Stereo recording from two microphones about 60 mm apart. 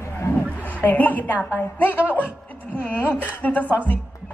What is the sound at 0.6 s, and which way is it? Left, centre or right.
A woman's voice, left.